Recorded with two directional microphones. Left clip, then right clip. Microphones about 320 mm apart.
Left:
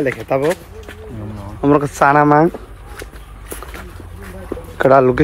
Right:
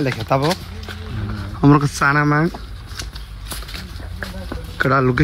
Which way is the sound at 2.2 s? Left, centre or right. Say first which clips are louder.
Left 7 dB; left.